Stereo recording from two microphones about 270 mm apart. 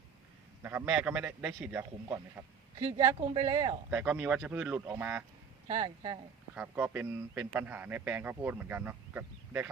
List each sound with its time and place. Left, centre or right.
0.6 s a man's voice: centre
3.8 s speech: centre
5.6 s a man's voice: centre
6.5 s a man's voice: centre